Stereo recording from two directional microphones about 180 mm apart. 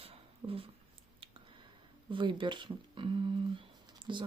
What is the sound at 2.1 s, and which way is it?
Speech, 25° right (ahead or behind).